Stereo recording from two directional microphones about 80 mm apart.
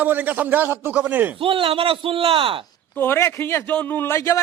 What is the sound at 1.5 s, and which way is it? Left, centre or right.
Speech, right.